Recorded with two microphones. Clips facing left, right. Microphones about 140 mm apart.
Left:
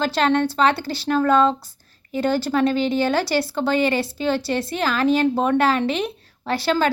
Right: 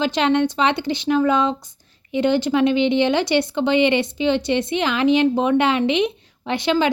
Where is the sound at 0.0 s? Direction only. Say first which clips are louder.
Right 1 dB; 15° right (ahead or behind).